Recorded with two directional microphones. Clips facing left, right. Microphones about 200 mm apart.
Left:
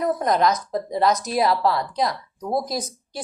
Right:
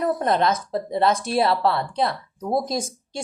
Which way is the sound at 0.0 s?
30° right (ahead or behind).